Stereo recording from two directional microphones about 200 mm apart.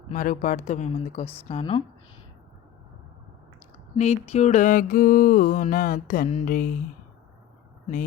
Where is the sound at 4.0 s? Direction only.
30° left (ahead or behind).